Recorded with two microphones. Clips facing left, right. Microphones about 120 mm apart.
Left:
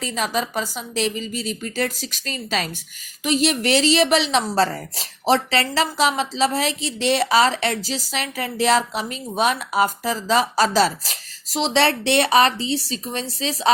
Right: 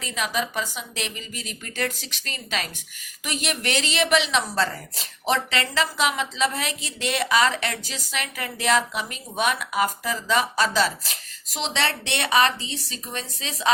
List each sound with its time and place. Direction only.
0.0 s a woman's voice: 35° left (ahead or behind)